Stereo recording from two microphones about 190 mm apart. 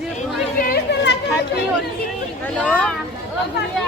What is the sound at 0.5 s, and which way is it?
Speech, 50° left (ahead or behind).